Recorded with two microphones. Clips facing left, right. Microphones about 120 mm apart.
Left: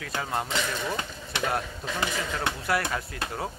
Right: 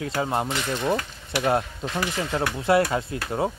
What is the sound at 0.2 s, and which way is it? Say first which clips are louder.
Speech: right 6 dB; 25° right (ahead or behind).